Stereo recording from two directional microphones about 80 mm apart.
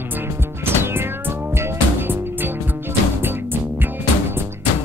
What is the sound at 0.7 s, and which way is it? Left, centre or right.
Music, right.